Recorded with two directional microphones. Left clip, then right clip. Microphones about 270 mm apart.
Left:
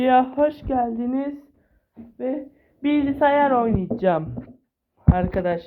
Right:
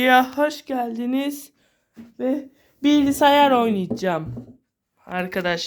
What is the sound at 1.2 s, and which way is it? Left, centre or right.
Speech, right.